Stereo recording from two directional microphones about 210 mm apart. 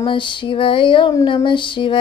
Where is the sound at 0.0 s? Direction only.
25° left (ahead or behind).